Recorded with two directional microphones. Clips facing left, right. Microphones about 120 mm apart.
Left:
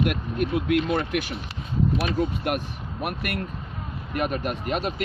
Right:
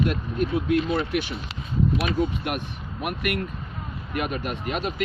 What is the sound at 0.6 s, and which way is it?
Speech, 60° left (ahead or behind).